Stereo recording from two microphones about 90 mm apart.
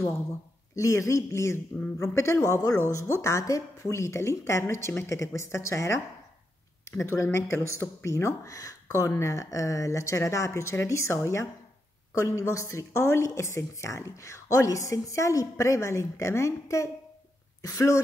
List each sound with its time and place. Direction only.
0.7 s a woman's voice: 35° left (ahead or behind)